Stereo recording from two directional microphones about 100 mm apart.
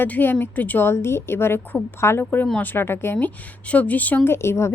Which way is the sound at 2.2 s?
10° left (ahead or behind).